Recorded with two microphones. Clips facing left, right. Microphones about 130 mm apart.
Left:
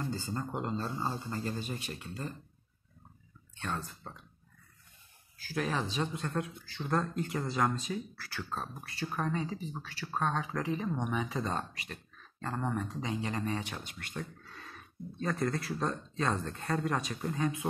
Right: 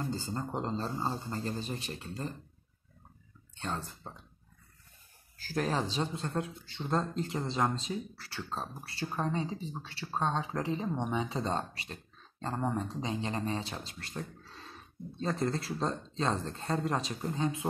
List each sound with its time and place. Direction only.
0.1 s speech: 25° right (ahead or behind)
3.5 s speech: 30° right (ahead or behind)
5.4 s speech: 40° right (ahead or behind)
5.9 s speech: 30° right (ahead or behind)